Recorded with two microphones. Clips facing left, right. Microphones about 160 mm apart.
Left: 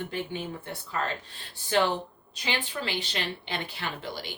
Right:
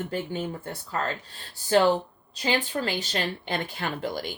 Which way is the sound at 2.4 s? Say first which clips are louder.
Right 6 dB; 45° right (ahead or behind).